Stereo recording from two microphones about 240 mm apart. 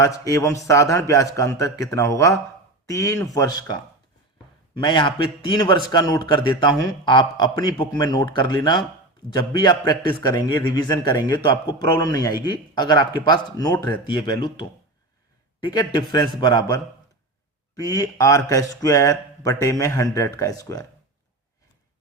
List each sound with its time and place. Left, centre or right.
0.0 s a man's voice: centre
4.8 s a man's voice: centre
15.7 s a man's voice: centre